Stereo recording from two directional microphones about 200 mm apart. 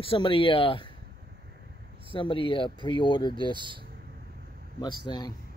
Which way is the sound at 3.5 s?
25° right (ahead or behind).